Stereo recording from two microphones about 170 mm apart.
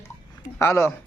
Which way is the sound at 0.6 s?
15° left (ahead or behind).